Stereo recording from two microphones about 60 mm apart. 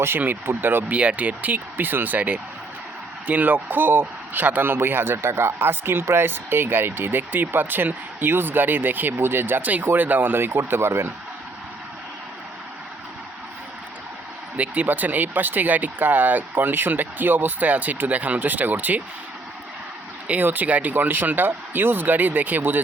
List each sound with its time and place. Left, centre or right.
0.2 s speech: right
0.9 s speech: right
14.5 s speech: right
20.2 s speech: right